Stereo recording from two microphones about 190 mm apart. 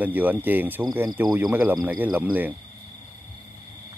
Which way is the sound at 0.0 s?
10° right (ahead or behind).